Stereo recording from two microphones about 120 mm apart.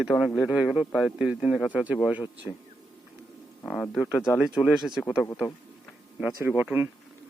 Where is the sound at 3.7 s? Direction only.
10° left (ahead or behind).